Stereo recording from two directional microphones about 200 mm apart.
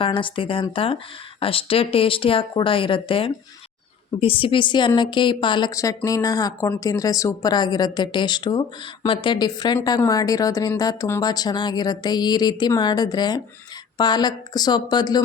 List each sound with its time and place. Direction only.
0.0 s a woman's voice: 25° left (ahead or behind)